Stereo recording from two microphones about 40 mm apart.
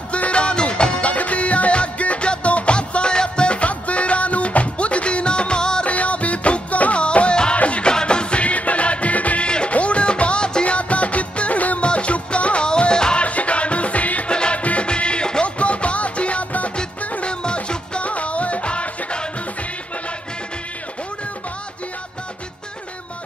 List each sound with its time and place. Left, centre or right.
0.1 s music: left
1.0 s music: left
5.9 s music: left
7.9 s music: left
13.2 s music: left
14.3 s music: left
14.6 s music: left
14.9 s music: left
17.3 s music: left